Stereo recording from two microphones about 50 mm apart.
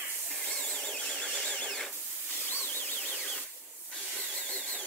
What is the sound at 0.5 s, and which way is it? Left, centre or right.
Tools, centre.